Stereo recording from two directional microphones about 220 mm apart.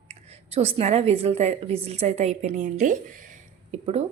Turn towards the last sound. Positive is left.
turn(degrees=-30)  # may be behind; listen again after turning